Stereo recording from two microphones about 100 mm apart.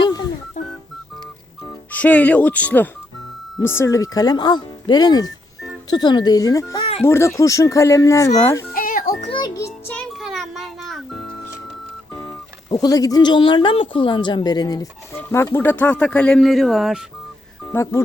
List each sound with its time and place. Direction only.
0.0 s music: 45° left (ahead or behind)
1.9 s speech: 15° left (ahead or behind); by 6.7 s 35° left (ahead or behind)
6.7 s music: 75° left (ahead or behind)
7.0 s speech: 25° left (ahead or behind)
10.2 s music: centre (ahead or behind)
12.7 s speech: 40° left (ahead or behind)
15.1 s music: 25° left (ahead or behind)
15.5 s speech: 20° left (ahead or behind)
16.4 s speech: centre (ahead or behind)
17.7 s speech: 30° left (ahead or behind)